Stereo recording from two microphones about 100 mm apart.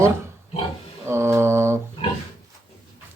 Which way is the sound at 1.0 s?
25° right (ahead or behind).